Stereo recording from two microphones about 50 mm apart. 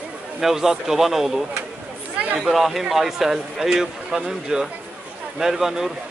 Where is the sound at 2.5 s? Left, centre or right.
Centre.